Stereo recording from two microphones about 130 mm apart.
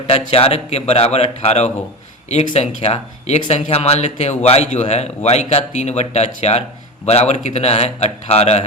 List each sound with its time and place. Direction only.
0.1 s a man's voice: 50° left (ahead or behind)